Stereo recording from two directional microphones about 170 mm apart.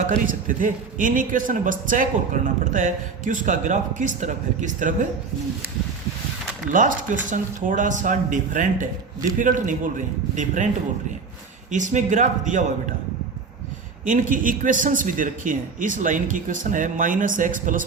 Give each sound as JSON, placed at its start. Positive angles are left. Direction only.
{"t": 0.1, "sound": "a man's voice", "side_deg": -50}
{"t": 6.7, "sound": "a man's voice", "side_deg": -50}
{"t": 11.7, "sound": "a man's voice", "side_deg": -45}
{"t": 14.0, "sound": "a man's voice", "side_deg": -50}